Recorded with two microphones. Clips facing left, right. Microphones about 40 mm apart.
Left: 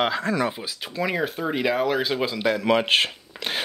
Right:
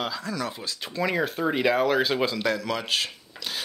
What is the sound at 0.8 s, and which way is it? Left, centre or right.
Speech, centre.